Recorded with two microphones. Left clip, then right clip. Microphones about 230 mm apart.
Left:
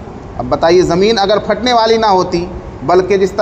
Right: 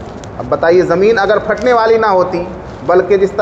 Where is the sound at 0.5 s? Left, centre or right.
Left.